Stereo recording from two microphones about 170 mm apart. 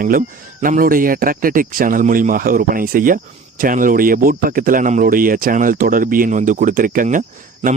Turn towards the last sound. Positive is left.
turn(degrees=-40)  # may be behind; listen again after turning